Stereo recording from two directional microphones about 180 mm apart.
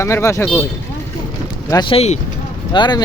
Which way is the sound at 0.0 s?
15° left (ahead or behind).